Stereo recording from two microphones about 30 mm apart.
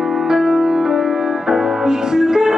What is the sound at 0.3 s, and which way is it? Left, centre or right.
Music, right.